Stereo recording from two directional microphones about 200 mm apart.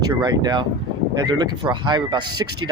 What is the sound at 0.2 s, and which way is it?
Speech, 20° right (ahead or behind).